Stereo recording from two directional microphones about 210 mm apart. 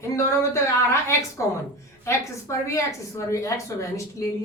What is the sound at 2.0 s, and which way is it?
Speech, 15° left (ahead or behind).